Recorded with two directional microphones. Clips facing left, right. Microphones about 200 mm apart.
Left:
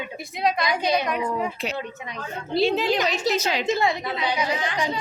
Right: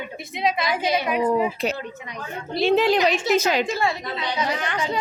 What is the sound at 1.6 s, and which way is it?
Speech, 45° right (ahead or behind).